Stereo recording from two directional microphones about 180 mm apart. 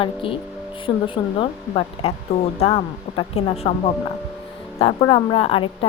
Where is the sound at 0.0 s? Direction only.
30° left (ahead or behind).